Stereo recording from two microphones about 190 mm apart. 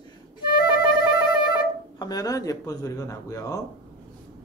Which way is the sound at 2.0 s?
20° left (ahead or behind).